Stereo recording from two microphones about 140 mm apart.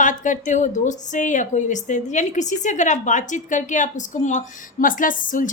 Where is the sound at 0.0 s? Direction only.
65° left (ahead or behind).